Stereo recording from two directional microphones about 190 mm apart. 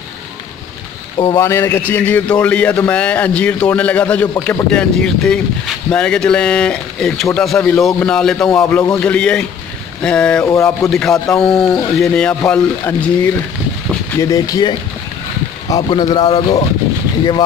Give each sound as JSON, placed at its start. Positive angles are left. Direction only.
{"t": 1.2, "sound": "a man's voice", "side_deg": 15}
{"t": 10.5, "sound": "a man's voice", "side_deg": 15}
{"t": 10.9, "sound": "speech", "side_deg": 5}
{"t": 14.2, "sound": "speech", "side_deg": 20}